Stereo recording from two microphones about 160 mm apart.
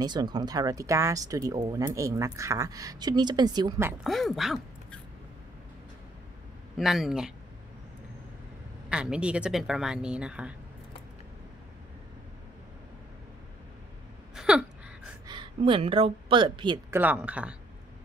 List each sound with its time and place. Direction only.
0.0 s speech: 25° right (ahead or behind)
4.0 s a woman's voice: centre (ahead or behind)
6.8 s a woman's voice: centre (ahead or behind)
8.8 s a woman's voice: 5° right (ahead or behind)
14.3 s gasp: 5° right (ahead or behind)
15.2 s a woman's voice: 30° right (ahead or behind)
16.9 s a woman's voice: 10° right (ahead or behind)